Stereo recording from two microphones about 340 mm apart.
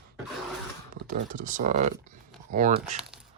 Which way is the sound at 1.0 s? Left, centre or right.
Right.